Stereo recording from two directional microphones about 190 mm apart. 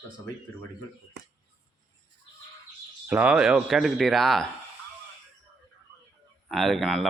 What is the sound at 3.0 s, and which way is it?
Speech, 5° right (ahead or behind).